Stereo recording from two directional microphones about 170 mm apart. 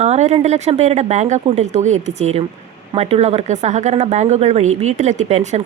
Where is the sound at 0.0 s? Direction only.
40° right (ahead or behind).